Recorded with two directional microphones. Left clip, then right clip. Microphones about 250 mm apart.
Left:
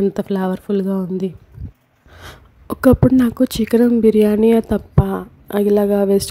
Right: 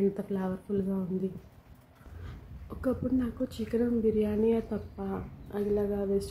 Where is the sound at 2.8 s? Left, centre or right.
Left.